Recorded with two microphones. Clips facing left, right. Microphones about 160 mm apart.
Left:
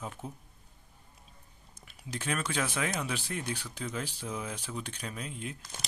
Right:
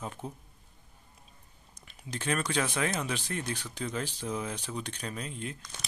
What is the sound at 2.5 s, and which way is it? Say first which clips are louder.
Speech: right 2 dB; 5° left (ahead or behind).